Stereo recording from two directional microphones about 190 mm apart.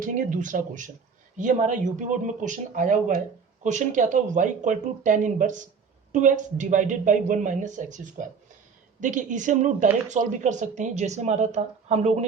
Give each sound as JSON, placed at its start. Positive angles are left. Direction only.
{"t": 0.0, "sound": "speech", "side_deg": -45}